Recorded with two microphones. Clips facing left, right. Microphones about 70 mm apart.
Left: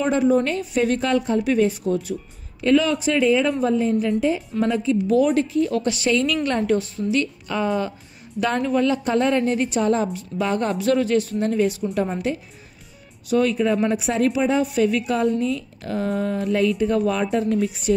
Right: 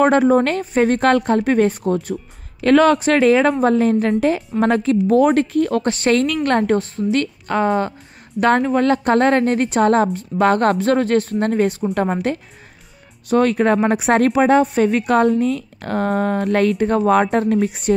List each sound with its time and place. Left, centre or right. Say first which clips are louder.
0.0 s a woman's voice: right 5 dB; right
0.7 s a woman's voice: right 5 dB; right
1.0 s a woman's voice: right 5 dB; right
2.6 s a woman's voice: right 5 dB; right
5.0 s a woman's voice: right 4 dB; right
10.8 s a woman's voice: right 3 dB; right
14.6 s a woman's voice: right 4 dB; right